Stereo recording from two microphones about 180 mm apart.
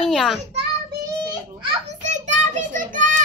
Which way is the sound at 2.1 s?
45° right (ahead or behind).